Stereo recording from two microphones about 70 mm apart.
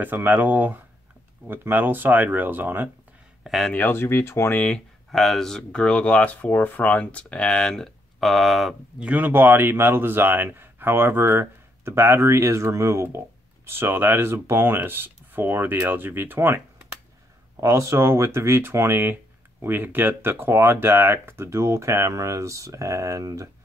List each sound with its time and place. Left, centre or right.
0.0 s speech: right
3.4 s speech: centre
3.7 s speech: left
4.6 s speech: centre
9.0 s speech: right
17.6 s speech: right